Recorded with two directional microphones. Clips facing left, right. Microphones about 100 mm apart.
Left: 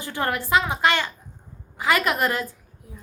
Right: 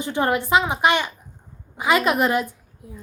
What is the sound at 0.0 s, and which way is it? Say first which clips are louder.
A woman's voice: right 5 dB; 20° right (ahead or behind).